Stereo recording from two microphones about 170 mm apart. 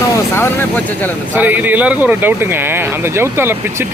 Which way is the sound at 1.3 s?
10° right (ahead or behind).